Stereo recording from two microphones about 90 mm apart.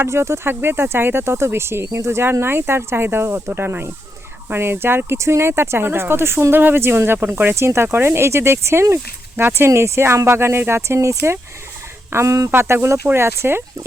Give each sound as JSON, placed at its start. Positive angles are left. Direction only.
{"t": 0.0, "sound": "speech", "side_deg": -30}